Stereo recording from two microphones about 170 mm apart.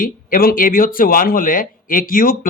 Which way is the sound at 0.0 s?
55° left (ahead or behind).